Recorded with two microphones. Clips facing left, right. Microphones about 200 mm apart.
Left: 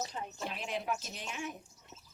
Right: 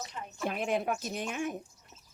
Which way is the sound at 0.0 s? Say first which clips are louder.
Left 2 dB; 30° left (ahead or behind).